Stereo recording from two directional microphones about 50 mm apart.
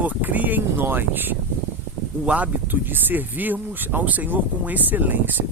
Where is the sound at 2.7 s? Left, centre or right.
Right.